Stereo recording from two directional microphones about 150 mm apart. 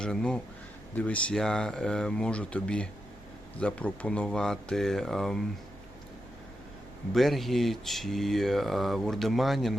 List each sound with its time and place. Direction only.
0.0 s speech: 5° left (ahead or behind)
7.1 s speech: centre (ahead or behind)